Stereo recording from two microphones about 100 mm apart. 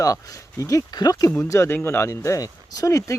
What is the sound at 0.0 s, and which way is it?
Speech, 35° left (ahead or behind).